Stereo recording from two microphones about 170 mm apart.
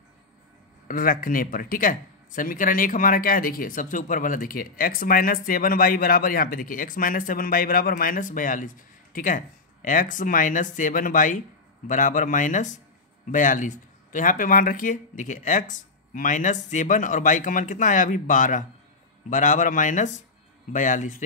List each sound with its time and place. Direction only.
0.8 s speech: 55° left (ahead or behind)